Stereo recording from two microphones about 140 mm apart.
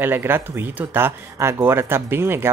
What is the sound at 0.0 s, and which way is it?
Speech, 15° right (ahead or behind).